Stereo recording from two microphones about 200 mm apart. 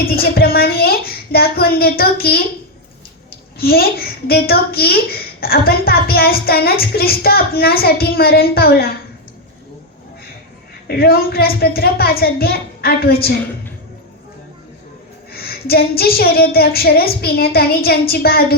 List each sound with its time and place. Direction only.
0.0 s a child's voice: 50° left (ahead or behind)
3.6 s a child's voice: 50° left (ahead or behind)
10.8 s a child's voice: 50° left (ahead or behind)
15.3 s a child's voice: 50° left (ahead or behind)